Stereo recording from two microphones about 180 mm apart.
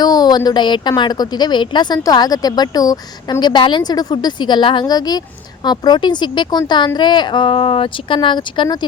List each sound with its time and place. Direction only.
0.0 s a woman's voice: 20° left (ahead or behind)